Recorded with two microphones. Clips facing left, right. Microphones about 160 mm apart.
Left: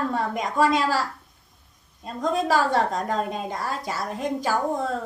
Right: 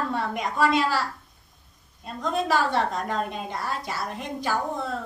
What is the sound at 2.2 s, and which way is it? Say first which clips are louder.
A woman's voice: left 2 dB; 40° left (ahead or behind).